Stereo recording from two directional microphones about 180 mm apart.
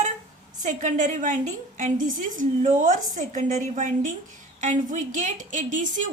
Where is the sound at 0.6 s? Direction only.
45° right (ahead or behind).